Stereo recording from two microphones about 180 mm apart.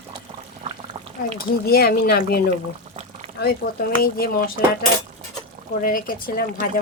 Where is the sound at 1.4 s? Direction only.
60° left (ahead or behind).